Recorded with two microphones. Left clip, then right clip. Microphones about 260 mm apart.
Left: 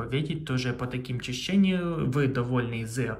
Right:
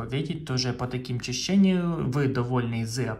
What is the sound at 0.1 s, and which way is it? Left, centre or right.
Speech, centre.